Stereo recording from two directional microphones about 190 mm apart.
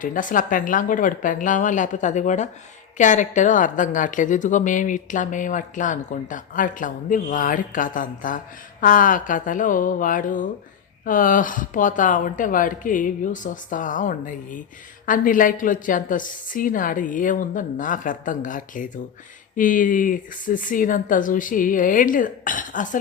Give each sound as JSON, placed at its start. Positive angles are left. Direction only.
{"t": 0.0, "sound": "a woman's voice", "side_deg": 45}